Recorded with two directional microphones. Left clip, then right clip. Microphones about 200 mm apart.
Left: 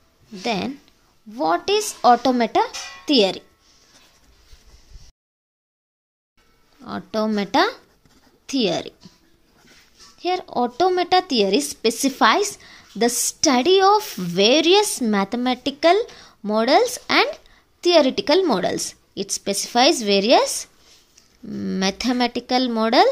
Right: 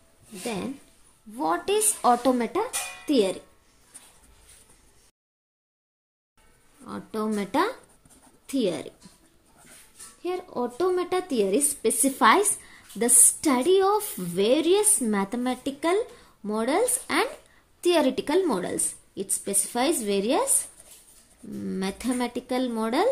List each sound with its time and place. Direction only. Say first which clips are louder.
1.3 s a woman's voice: left 5 dB; 25° left (ahead or behind)
6.8 s a woman's voice: left 7 dB; 30° left (ahead or behind)
10.2 s a woman's voice: left 8 dB; 35° left (ahead or behind)
21.5 s speech: left 8 dB; 30° left (ahead or behind)